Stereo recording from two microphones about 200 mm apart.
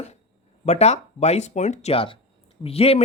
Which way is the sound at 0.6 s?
35° left (ahead or behind).